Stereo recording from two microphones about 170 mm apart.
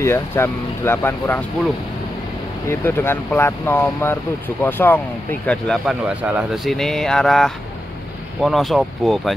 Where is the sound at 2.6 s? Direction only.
15° left (ahead or behind).